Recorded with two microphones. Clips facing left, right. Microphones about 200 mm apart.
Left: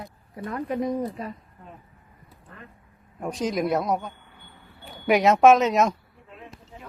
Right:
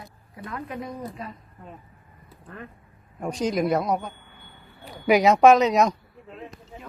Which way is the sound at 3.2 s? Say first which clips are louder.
Right 1 dB; centre (ahead or behind).